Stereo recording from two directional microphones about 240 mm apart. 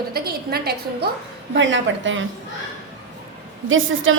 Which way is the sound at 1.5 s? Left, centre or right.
Right.